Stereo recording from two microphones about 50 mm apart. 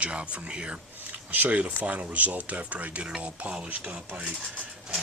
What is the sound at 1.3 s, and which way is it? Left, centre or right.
Speech, right.